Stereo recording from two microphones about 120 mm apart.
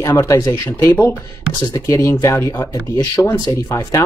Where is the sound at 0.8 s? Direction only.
20° left (ahead or behind).